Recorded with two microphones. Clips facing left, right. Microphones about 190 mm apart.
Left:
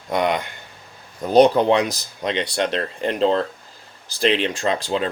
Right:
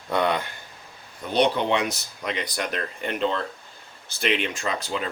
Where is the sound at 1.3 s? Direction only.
40° left (ahead or behind).